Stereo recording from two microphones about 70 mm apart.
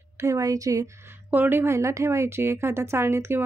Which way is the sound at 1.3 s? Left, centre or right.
Right.